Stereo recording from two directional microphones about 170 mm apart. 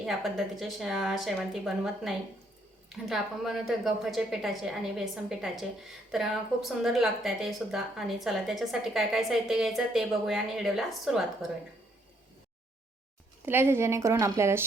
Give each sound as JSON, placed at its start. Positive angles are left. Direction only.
{"t": 0.0, "sound": "speech", "side_deg": 0}
{"t": 13.4, "sound": "speech", "side_deg": -15}